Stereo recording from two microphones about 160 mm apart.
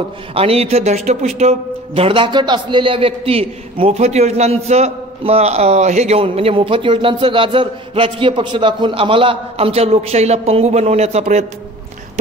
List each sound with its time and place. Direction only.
0.3 s speech: 40° right (ahead or behind)